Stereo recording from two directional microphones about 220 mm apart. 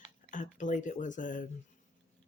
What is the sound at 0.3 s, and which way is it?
Speech, 35° left (ahead or behind).